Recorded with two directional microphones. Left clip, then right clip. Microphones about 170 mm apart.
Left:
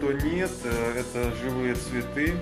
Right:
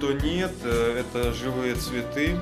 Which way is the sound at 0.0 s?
20° right (ahead or behind).